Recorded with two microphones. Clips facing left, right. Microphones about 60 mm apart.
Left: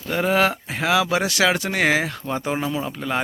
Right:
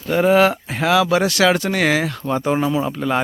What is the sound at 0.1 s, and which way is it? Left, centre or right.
Speech, centre.